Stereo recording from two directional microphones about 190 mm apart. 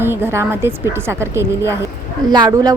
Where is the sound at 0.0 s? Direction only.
10° right (ahead or behind).